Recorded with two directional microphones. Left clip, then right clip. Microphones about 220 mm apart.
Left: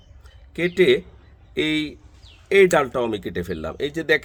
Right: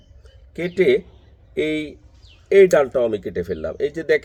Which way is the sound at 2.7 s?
50° left (ahead or behind).